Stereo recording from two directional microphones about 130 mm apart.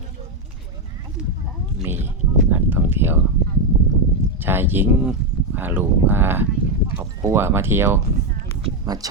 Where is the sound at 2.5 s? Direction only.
15° right (ahead or behind).